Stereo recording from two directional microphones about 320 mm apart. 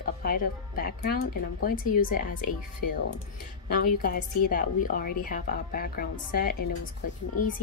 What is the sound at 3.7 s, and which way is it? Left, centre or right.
Speech, left.